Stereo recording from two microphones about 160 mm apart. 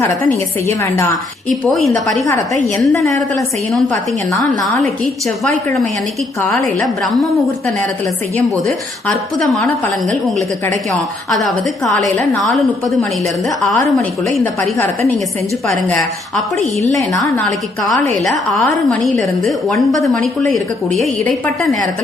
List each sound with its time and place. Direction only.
0.8 s a woman's voice: 20° left (ahead or behind)
1.6 s a woman's voice: 5° left (ahead or behind)
2.0 s a woman's voice: 20° left (ahead or behind)
6.8 s a woman's voice: centre (ahead or behind)
9.0 s a woman's voice: 5° left (ahead or behind)
14.6 s a woman's voice: 15° left (ahead or behind)
15.9 s a woman's voice: 5° left (ahead or behind)
18.3 s a woman's voice: 5° left (ahead or behind)